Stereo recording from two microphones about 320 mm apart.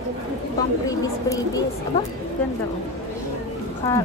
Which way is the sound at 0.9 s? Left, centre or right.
Centre.